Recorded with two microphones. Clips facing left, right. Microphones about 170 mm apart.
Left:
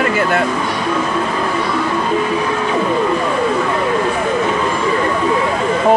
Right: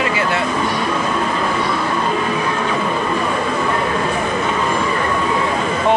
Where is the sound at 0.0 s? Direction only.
50° left (ahead or behind).